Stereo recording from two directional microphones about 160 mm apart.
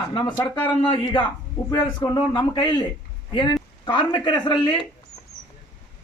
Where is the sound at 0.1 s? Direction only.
30° left (ahead or behind).